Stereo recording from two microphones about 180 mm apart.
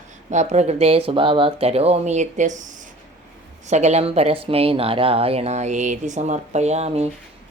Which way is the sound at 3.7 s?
40° right (ahead or behind).